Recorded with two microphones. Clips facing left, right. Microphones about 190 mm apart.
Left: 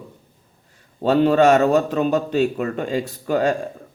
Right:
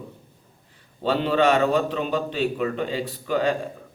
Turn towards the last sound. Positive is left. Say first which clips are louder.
# left 3 dB
turn(degrees=45)  # may be behind; listen again after turning